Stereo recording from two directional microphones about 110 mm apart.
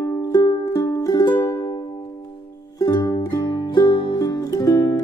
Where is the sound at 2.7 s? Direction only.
30° left (ahead or behind).